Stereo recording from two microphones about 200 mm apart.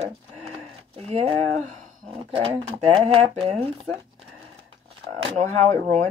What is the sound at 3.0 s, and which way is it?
Speech, 30° right (ahead or behind).